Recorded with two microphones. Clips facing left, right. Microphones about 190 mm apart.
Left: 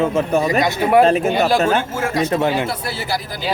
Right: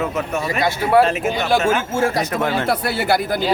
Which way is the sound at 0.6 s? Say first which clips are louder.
Right 2 dB; 20° left (ahead or behind).